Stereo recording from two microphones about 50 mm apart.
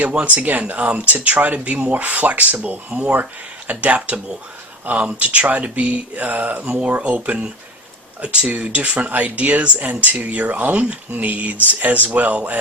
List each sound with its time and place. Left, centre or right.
0.0 s speech: right